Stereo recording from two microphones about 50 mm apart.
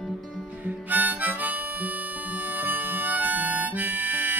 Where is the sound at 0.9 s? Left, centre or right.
Right.